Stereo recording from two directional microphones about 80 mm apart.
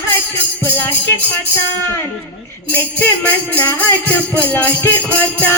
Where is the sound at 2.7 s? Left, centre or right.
Left.